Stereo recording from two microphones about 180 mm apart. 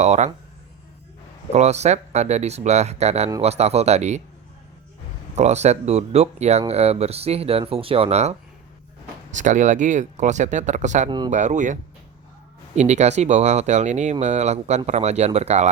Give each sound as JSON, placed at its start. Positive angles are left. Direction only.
{"t": 0.0, "sound": "speech", "side_deg": -40}
{"t": 1.5, "sound": "speech", "side_deg": -40}
{"t": 5.4, "sound": "speech", "side_deg": -40}